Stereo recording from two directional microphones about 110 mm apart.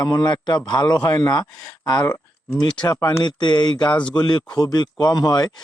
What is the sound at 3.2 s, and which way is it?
A man's voice, 45° left (ahead or behind).